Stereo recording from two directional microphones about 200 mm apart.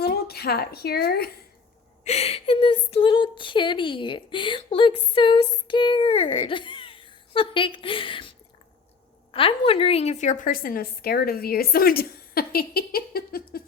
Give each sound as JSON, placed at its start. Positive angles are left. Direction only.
{"t": 0.0, "sound": "a woman's voice", "side_deg": 50}
{"t": 2.0, "sound": "speech", "side_deg": 30}
{"t": 9.3, "sound": "a woman's voice", "side_deg": 25}